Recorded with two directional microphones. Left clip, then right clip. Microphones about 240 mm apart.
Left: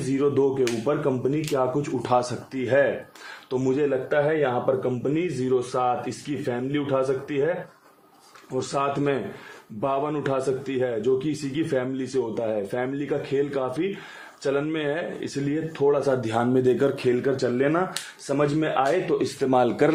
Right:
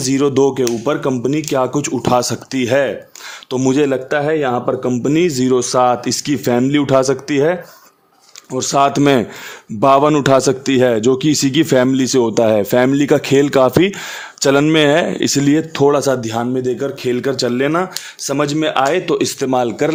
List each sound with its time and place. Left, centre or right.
0.1 s a man's voice: right
8.5 s a man's voice: right
16.2 s speech: right
16.6 s speech: centre
17.1 s speech: right
19.5 s speech: centre